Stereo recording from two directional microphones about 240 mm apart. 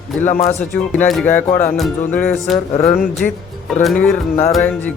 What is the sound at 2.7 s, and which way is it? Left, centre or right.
Speech, left.